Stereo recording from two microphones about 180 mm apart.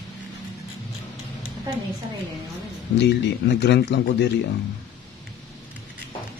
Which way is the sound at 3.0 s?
70° left (ahead or behind).